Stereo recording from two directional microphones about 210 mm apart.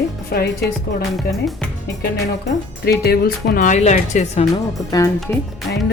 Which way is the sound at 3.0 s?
50° left (ahead or behind).